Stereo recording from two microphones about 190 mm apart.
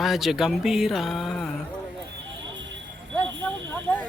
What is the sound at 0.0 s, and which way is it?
Speech, centre (ahead or behind).